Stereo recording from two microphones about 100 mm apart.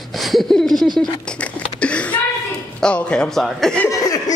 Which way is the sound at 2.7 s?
10° left (ahead or behind).